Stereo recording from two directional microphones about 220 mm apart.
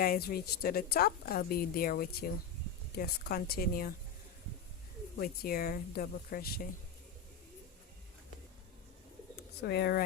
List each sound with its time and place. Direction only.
0.0 s a woman's voice: 40° left (ahead or behind)
5.2 s speech: 40° left (ahead or behind)
9.6 s a woman's voice: 50° left (ahead or behind)